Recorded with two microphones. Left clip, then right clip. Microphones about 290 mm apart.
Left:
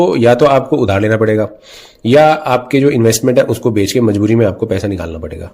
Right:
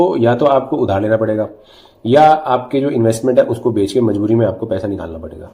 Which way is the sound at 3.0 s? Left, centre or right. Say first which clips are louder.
Left 2 dB; left.